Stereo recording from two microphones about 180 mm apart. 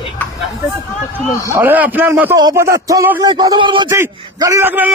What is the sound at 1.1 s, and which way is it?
Speech, 15° left (ahead or behind).